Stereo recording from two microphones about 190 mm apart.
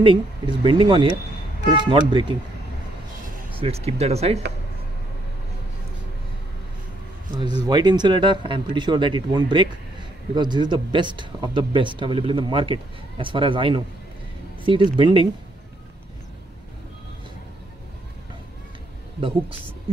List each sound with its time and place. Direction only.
0.0 s speech: 25° right (ahead or behind)
3.5 s speech: 30° right (ahead or behind)
7.6 s speech: 20° right (ahead or behind)